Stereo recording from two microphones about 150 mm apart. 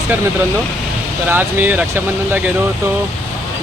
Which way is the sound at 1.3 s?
15° right (ahead or behind).